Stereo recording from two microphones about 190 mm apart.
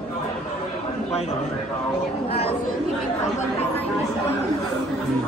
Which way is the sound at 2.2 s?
30° left (ahead or behind).